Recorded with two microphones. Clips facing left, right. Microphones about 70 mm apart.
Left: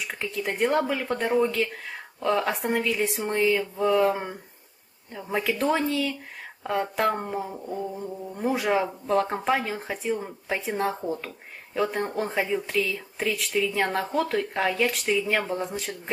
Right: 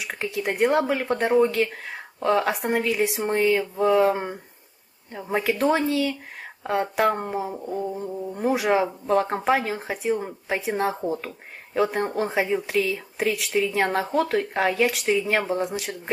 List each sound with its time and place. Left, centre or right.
0.0 s speech: centre